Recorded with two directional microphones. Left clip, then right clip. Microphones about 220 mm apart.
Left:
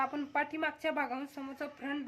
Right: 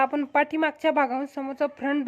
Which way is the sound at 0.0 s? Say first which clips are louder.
Right 11 dB; 40° right (ahead or behind).